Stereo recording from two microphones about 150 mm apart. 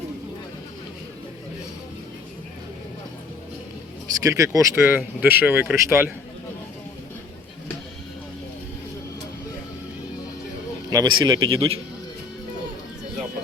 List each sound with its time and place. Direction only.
4.2 s speech: 20° right (ahead or behind)
10.8 s a man's voice: 25° right (ahead or behind)